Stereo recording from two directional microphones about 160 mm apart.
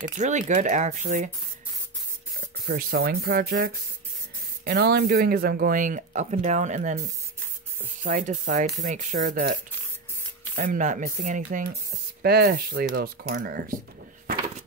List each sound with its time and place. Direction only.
0.2 s speech: 50° right (ahead or behind)
2.7 s speech: 70° right (ahead or behind)
4.6 s speech: 85° right; by 7.0 s 50° right (ahead or behind)
8.0 s speech: 55° right (ahead or behind)
12.2 s speech: 80° right; by 13.7 s 65° right (ahead or behind)